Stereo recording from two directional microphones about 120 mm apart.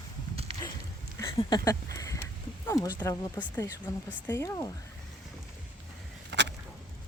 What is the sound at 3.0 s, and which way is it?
Speech, 20° left (ahead or behind).